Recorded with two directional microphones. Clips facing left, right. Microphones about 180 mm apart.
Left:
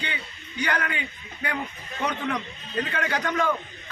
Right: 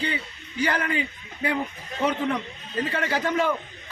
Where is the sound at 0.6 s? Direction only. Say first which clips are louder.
Right 3 dB; 30° right (ahead or behind).